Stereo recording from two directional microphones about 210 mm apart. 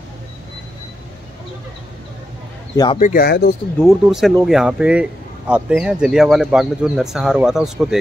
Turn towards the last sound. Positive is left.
turn(degrees=0)  # may be behind; listen again after turning